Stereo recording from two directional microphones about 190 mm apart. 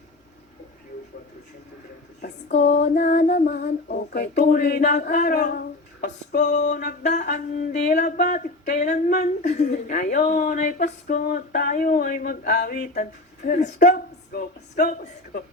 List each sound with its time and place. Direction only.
2.6 s female singing: 65° left (ahead or behind)
2.8 s a woman's voice: 40° left (ahead or behind); by 4.3 s 55° left (ahead or behind)
4.4 s a woman's voice: 45° left (ahead or behind)
4.8 s a sound: 40° left (ahead or behind); by 6.4 s 55° left (ahead or behind)
6.4 s a sound: 40° left (ahead or behind)
9.1 s a woman's voice: 45° left (ahead or behind)
14.3 s a woman's voice: 50° left (ahead or behind)